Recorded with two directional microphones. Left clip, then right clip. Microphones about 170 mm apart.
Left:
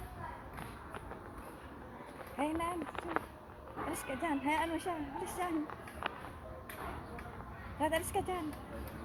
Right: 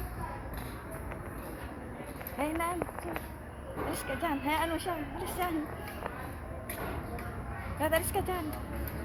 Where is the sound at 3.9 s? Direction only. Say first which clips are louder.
Right 4 dB; 45° left (ahead or behind).